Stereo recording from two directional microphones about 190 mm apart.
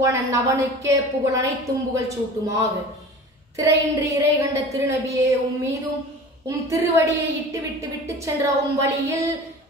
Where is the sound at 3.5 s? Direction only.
15° right (ahead or behind).